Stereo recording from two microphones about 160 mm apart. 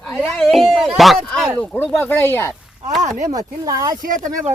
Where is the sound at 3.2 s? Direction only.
20° right (ahead or behind).